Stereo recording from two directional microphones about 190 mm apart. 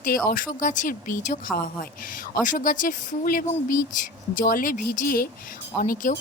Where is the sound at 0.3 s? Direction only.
45° left (ahead or behind).